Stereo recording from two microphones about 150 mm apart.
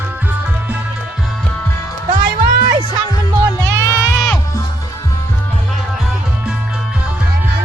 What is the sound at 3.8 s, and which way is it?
Music, 15° left (ahead or behind).